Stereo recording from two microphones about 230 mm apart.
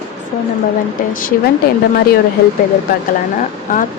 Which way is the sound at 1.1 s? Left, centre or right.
Left.